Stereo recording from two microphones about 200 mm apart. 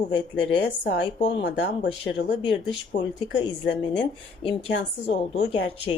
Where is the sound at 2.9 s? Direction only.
55° left (ahead or behind).